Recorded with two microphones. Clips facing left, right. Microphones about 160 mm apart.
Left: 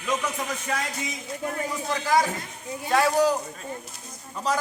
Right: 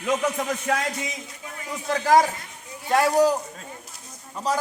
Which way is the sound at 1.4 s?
55° left (ahead or behind).